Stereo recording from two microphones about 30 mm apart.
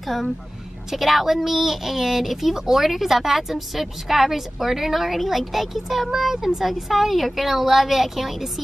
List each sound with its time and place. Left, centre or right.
0.0 s a woman's voice: centre
6.3 s a woman's voice: centre
6.6 s a woman's voice: centre